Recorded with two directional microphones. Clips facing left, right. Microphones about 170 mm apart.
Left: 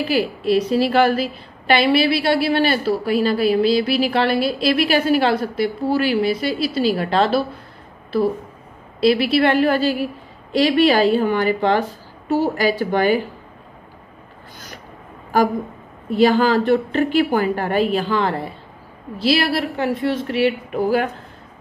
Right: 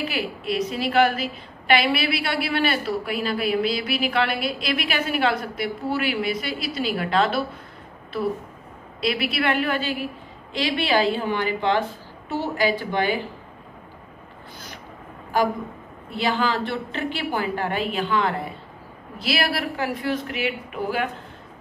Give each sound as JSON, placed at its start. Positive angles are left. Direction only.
{"t": 0.0, "sound": "a woman's voice", "side_deg": 35}
{"t": 9.0, "sound": "a woman's voice", "side_deg": 30}
{"t": 16.1, "sound": "a woman's voice", "side_deg": 45}